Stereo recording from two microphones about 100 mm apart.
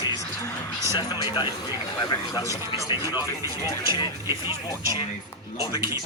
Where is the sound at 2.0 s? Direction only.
35° left (ahead or behind).